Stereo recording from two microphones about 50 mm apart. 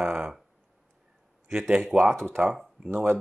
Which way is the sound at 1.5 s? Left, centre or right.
Centre.